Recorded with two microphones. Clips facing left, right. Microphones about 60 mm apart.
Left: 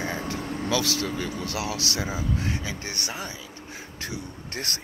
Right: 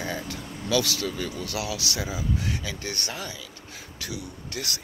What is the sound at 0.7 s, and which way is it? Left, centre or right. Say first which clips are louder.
Speech: right 1 dB; left.